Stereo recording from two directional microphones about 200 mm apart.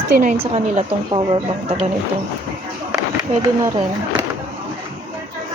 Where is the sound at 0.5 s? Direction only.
25° right (ahead or behind).